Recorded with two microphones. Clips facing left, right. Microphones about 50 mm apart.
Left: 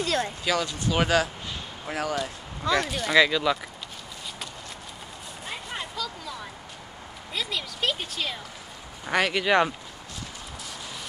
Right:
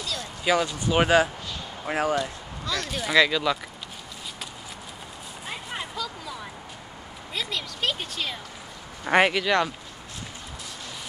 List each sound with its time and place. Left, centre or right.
0.0 s a sound: left
0.5 s speech: centre
2.6 s speech: left
2.9 s speech: centre
5.5 s a sound: centre
7.3 s speech: centre
9.0 s speech: right
9.5 s speech: centre